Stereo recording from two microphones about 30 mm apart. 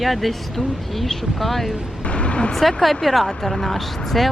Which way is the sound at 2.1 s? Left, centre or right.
Left.